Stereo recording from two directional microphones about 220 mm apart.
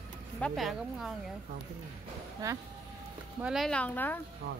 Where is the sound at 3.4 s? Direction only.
Centre (ahead or behind).